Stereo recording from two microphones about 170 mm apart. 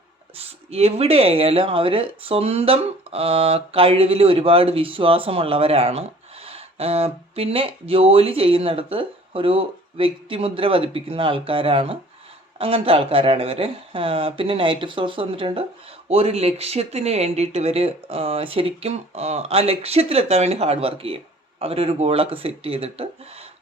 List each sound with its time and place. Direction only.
0.3 s speech: 35° right (ahead or behind)